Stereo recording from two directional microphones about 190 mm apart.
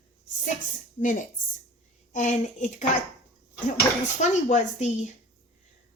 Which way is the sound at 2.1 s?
40° left (ahead or behind).